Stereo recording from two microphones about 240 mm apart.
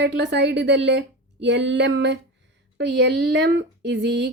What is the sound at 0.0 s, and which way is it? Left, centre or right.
A woman's voice, right.